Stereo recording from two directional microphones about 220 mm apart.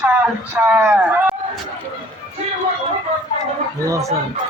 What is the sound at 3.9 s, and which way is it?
Speech, 15° right (ahead or behind).